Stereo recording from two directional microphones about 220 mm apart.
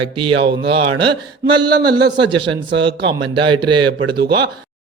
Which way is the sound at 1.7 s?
20° right (ahead or behind).